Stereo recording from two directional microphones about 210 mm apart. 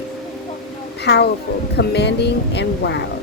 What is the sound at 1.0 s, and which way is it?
Speech, 50° left (ahead or behind).